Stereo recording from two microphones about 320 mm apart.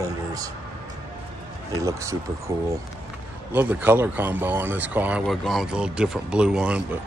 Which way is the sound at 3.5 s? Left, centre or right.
Centre.